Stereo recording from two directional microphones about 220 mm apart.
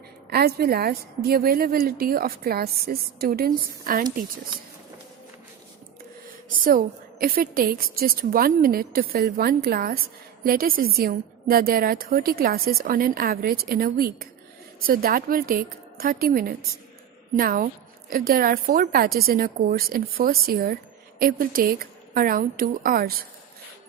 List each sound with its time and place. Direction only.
0.3 s a woman's voice: 45° right (ahead or behind)
6.5 s a woman's voice: 40° right (ahead or behind)